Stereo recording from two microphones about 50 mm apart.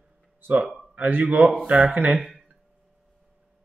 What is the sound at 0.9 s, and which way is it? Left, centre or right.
Speech, right.